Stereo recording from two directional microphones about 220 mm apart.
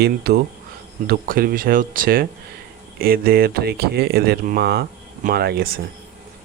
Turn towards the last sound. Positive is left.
turn(degrees=-45)  # may be behind; listen again after turning